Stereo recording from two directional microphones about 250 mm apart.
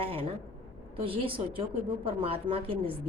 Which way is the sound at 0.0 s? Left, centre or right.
Right.